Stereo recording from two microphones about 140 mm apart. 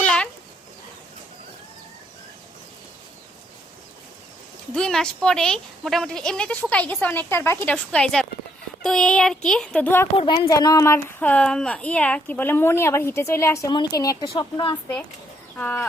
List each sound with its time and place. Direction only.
0.0 s a sound: 5° left (ahead or behind)
4.7 s a woman's voice: 5° left (ahead or behind)
10.2 s a woman's voice: 35° left (ahead or behind)
15.5 s a woman's voice: 10° left (ahead or behind)